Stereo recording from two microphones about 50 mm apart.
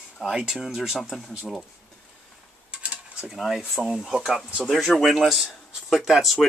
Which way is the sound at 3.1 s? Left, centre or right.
Centre.